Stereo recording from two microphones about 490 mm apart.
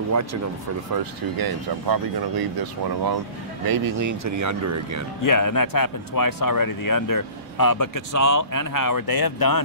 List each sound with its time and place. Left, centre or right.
0.1 s speech: right
1.4 s speech: right
5.2 s speech: left